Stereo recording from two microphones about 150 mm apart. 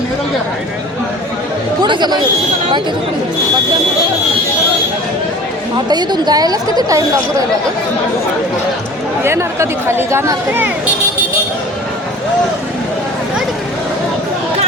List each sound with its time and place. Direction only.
1.8 s a woman's voice: 30° right (ahead or behind)
5.9 s a woman's voice: 30° right (ahead or behind)
9.2 s speech: 20° right (ahead or behind)